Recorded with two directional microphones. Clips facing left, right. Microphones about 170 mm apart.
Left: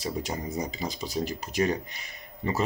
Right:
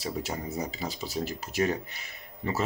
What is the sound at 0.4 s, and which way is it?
Speech, 15° left (ahead or behind).